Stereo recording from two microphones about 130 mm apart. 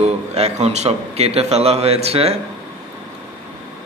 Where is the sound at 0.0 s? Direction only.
55° right (ahead or behind).